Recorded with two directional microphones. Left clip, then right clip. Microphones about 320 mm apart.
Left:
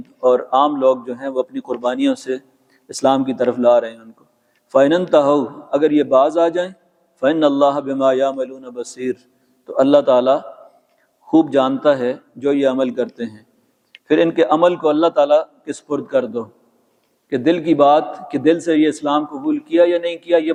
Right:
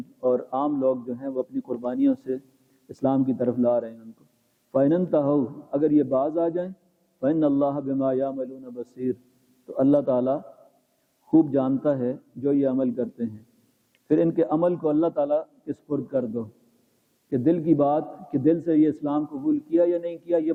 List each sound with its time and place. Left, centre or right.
0.2 s a man's voice: centre